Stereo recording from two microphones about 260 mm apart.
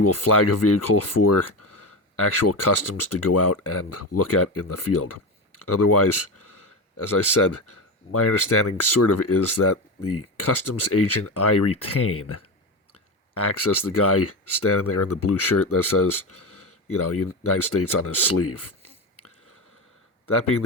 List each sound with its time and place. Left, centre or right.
0.0 s speech: left